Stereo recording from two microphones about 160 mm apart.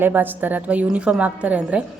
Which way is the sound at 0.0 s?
10° right (ahead or behind).